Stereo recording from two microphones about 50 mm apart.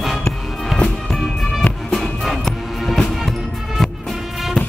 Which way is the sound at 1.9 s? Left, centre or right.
Centre.